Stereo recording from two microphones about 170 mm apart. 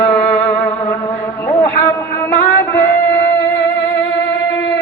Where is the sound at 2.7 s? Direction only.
15° left (ahead or behind).